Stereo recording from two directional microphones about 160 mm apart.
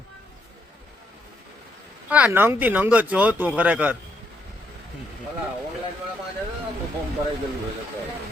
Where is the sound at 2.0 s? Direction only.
10° right (ahead or behind).